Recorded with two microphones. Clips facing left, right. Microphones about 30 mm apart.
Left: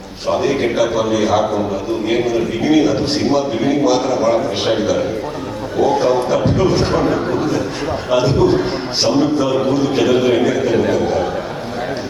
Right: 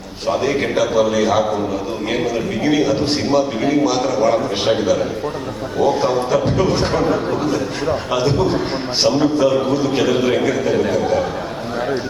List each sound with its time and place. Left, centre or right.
0.3 s a man's voice: centre
2.6 s a man's voice: centre
6.0 s a man's voice: centre